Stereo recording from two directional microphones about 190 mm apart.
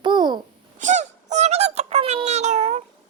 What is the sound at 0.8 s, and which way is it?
A child's voice, 40° right (ahead or behind).